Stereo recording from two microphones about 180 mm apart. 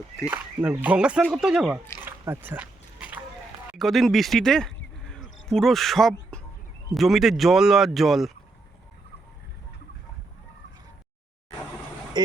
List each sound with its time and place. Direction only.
0.3 s speech: 10° right (ahead or behind)
2.0 s a sound: 10° right (ahead or behind)
3.7 s speech: centre (ahead or behind)
5.0 s a sound: 5° left (ahead or behind)
6.9 s speech: centre (ahead or behind)
12.1 s speech: 25° right (ahead or behind)